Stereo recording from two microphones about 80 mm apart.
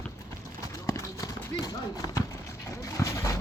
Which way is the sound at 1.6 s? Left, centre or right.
Left.